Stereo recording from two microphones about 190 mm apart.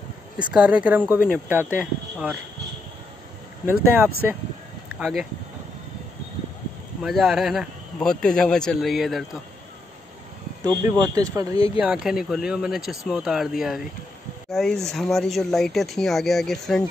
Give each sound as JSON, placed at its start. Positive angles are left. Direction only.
{"t": 0.5, "sound": "speech", "side_deg": -5}
{"t": 3.6, "sound": "speech", "side_deg": -10}
{"t": 7.0, "sound": "speech", "side_deg": 0}
{"t": 10.9, "sound": "speech", "side_deg": -15}
{"t": 11.8, "sound": "speech", "side_deg": -5}